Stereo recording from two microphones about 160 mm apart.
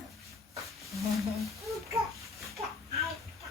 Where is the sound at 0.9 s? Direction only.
Centre (ahead or behind).